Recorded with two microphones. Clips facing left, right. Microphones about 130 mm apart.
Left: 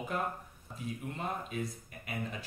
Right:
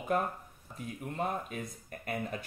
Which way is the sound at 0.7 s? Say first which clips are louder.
Right 2 dB; 50° right (ahead or behind).